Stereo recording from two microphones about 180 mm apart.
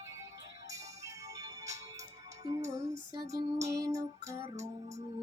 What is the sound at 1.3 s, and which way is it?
Music, 20° right (ahead or behind).